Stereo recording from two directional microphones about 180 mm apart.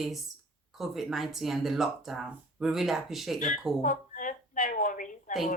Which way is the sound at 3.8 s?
45° left (ahead or behind).